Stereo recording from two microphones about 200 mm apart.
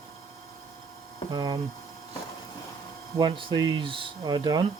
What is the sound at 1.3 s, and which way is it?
Speech, 20° right (ahead or behind).